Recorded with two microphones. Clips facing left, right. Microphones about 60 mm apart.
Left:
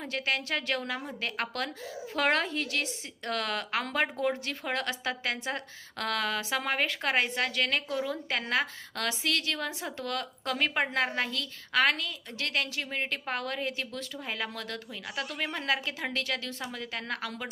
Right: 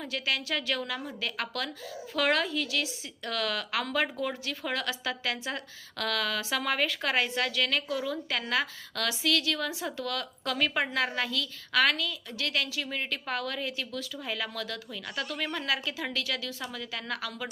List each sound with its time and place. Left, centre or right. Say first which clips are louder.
0.1 s a woman's voice: left 1 dB; left